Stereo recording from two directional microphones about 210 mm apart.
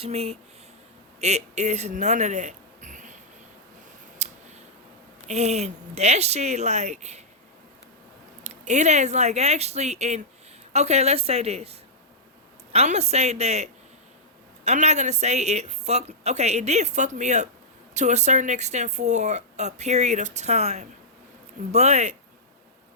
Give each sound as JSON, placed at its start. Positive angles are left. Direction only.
{"t": 0.0, "sound": "a woman's voice", "side_deg": -30}
{"t": 4.2, "sound": "scissors", "side_deg": -35}
{"t": 5.3, "sound": "speech", "side_deg": -30}
{"t": 8.4, "sound": "a woman's voice", "side_deg": -35}